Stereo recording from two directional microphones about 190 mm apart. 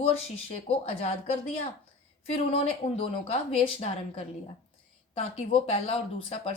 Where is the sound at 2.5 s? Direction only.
30° left (ahead or behind).